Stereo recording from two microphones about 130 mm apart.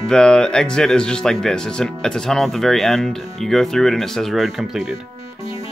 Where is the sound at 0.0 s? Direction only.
5° left (ahead or behind).